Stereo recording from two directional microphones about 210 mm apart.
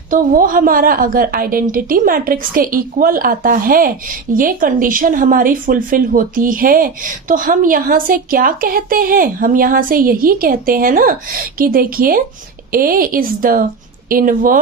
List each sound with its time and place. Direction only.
0.1 s a woman's voice: 40° right (ahead or behind)